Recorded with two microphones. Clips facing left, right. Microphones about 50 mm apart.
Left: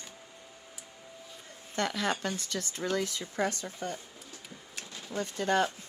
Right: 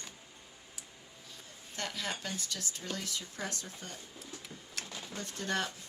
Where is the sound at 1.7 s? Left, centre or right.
Left.